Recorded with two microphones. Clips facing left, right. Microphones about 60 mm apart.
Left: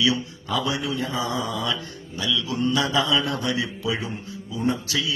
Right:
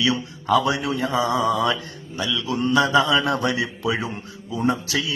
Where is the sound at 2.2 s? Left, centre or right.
Right.